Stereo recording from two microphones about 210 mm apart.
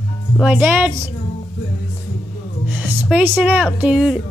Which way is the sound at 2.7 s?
5° right (ahead or behind).